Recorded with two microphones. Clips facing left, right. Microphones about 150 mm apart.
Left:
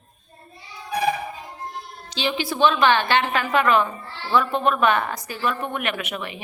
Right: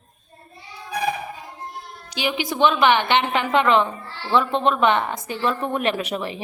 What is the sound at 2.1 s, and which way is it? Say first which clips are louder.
A woman's voice: even; 15° right (ahead or behind).